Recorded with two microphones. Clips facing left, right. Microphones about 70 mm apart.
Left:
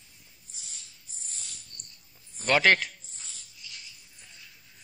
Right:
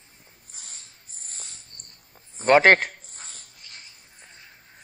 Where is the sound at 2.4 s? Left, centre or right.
Right.